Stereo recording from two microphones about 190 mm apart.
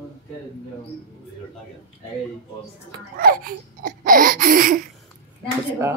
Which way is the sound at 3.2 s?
50° right (ahead or behind).